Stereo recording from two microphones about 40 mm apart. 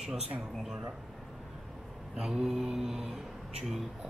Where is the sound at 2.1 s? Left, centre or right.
Right.